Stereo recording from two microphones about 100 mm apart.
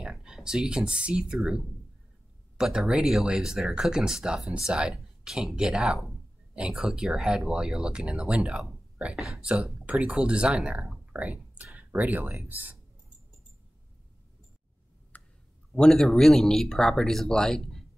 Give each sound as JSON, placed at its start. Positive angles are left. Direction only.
{"t": 0.0, "sound": "speech", "side_deg": -10}
{"t": 15.1, "sound": "clicking", "side_deg": 15}
{"t": 15.7, "sound": "speech", "side_deg": 5}